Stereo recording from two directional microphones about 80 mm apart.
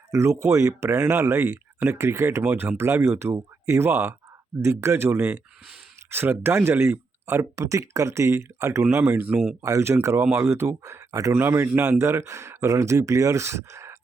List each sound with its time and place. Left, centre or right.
0.1 s speech: right
9.0 s speech: right
9.6 s speech: right